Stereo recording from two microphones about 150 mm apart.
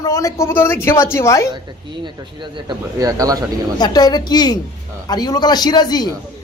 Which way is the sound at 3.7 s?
25° left (ahead or behind).